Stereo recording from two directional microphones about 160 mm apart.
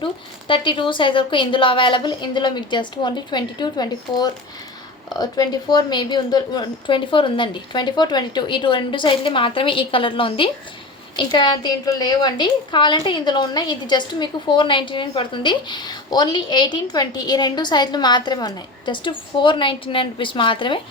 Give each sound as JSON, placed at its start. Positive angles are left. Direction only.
{"t": 0.0, "sound": "a woman's voice", "side_deg": 30}